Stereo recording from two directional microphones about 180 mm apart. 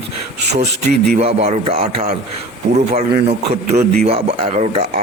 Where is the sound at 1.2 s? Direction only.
35° right (ahead or behind).